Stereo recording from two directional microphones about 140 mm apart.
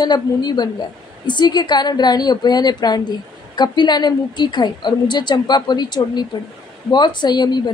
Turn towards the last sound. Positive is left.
turn(degrees=30)  # may be behind; listen again after turning